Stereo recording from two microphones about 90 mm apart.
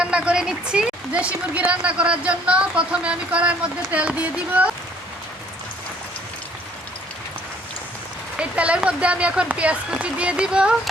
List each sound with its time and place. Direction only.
0.0 s a woman's voice: 10° right (ahead or behind)
8.4 s a woman's voice: 15° right (ahead or behind)